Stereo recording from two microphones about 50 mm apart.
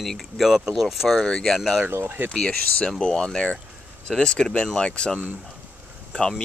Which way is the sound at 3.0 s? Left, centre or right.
Centre.